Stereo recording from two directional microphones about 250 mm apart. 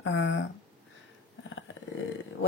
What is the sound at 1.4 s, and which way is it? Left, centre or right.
Dog, left.